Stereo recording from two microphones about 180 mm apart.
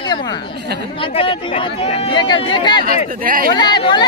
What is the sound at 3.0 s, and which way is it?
Speech, 50° right (ahead or behind).